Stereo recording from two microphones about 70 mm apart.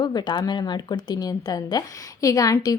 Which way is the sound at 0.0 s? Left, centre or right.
Left.